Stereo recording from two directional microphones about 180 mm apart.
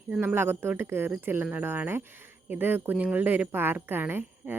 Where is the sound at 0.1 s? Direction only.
10° right (ahead or behind).